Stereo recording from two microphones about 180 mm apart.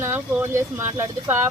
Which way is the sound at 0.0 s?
10° right (ahead or behind).